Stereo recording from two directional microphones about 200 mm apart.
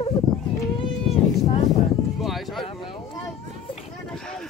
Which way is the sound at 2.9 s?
25° left (ahead or behind).